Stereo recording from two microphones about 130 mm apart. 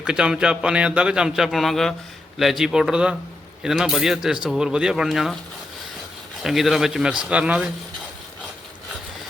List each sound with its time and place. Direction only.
0.0 s a man's voice: 5° right (ahead or behind)
6.4 s speech: centre (ahead or behind)